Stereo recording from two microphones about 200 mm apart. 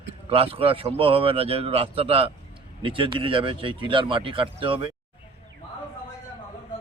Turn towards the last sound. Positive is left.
turn(degrees=-25)  # may be behind; listen again after turning